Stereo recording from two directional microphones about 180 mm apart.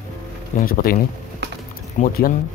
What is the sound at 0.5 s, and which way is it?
Speech, 55° left (ahead or behind).